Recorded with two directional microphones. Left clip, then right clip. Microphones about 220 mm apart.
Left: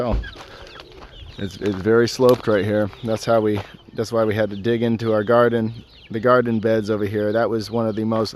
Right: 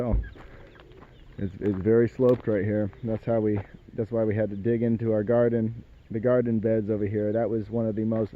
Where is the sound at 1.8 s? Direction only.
10° left (ahead or behind).